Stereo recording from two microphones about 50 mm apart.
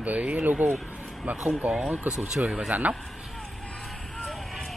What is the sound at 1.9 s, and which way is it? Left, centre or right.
Speech, right.